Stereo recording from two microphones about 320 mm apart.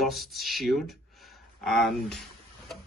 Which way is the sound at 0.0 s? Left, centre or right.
Centre.